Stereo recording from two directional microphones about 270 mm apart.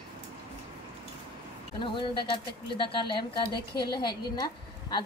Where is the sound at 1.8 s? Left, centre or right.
Centre.